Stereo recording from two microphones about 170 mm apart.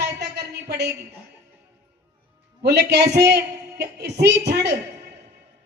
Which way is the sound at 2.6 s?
75° right (ahead or behind).